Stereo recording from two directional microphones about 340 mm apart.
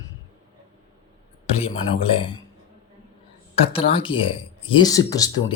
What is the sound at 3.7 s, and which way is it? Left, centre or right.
Speech, centre.